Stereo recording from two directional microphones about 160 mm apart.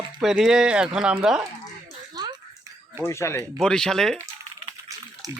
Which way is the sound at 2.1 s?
25° right (ahead or behind).